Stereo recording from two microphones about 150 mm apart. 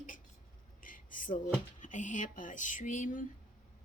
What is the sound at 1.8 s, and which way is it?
A woman's voice, 55° left (ahead or behind).